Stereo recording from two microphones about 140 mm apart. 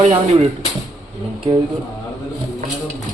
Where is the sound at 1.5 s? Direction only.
30° right (ahead or behind).